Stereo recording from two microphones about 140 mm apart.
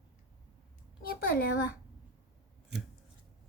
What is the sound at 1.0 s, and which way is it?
Speech, 90° left.